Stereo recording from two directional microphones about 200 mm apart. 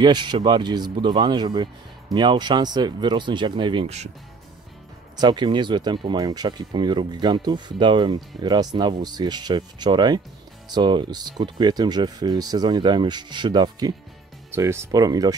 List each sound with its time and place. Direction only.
0.0 s speech: 20° right (ahead or behind)
5.2 s speech: 20° right (ahead or behind)